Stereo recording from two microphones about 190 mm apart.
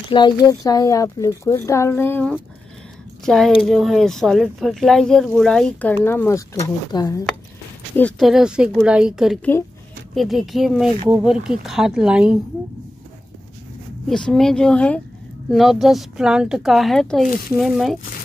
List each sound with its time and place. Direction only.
0.1 s speech: 20° left (ahead or behind)
7.9 s speech: 5° left (ahead or behind)
9.4 s speech: 10° left (ahead or behind)
10.1 s speech: centre (ahead or behind)
14.0 s speech: 5° left (ahead or behind)